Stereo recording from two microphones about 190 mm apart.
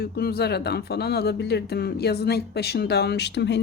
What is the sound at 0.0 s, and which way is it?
Speech, 55° left (ahead or behind).